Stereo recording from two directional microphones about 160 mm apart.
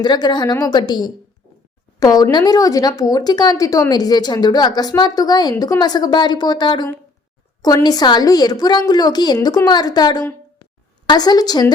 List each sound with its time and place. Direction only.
0.0 s speech: 25° left (ahead or behind)
7.9 s speech: 25° left (ahead or behind)